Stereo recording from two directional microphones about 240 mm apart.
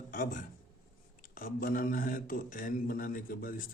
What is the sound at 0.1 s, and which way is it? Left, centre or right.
A man's voice, left.